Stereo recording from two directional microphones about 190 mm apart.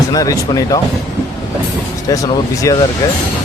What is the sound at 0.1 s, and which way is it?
Speech, 20° left (ahead or behind).